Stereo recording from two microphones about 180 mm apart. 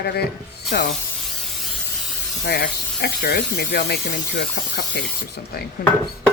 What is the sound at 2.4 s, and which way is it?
Speech, 60° left (ahead or behind).